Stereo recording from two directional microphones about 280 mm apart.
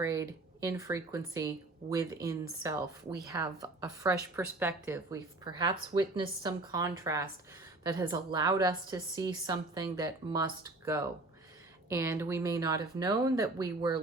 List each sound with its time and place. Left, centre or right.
0.0 s a woman's voice: centre
1.8 s speech: right
2.6 s a woman's voice: centre